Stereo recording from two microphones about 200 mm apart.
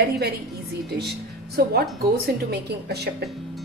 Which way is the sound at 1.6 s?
50° right (ahead or behind).